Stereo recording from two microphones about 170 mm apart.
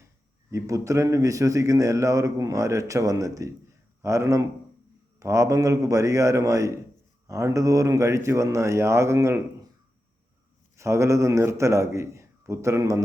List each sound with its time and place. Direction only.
0.5 s a man's voice: 20° right (ahead or behind)
10.8 s a man's voice: 15° right (ahead or behind)